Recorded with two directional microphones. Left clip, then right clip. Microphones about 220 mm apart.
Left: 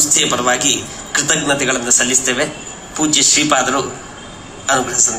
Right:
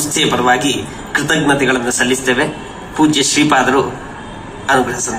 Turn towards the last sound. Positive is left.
turn(degrees=35)  # may be behind; listen again after turning